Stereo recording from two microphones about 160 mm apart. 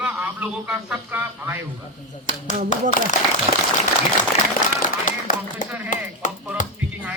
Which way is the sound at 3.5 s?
40° right (ahead or behind).